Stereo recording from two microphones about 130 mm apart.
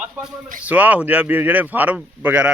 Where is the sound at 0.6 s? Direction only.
10° right (ahead or behind).